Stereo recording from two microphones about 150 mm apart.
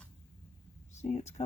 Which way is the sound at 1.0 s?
50° left (ahead or behind).